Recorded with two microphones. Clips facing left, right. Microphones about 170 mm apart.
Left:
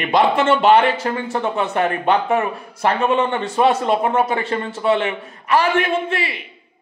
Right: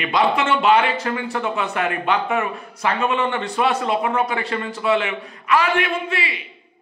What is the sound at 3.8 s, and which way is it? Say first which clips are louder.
A man's voice: left 3 dB; 45° left (ahead or behind).